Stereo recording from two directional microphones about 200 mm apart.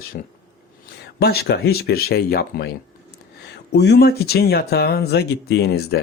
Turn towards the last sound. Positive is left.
turn(degrees=55)  # may be behind; listen again after turning